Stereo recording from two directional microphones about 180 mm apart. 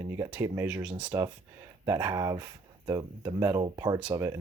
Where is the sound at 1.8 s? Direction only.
20° right (ahead or behind).